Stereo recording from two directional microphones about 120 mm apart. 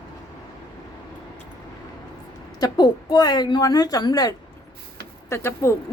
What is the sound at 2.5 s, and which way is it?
A woman's voice, 35° left (ahead or behind).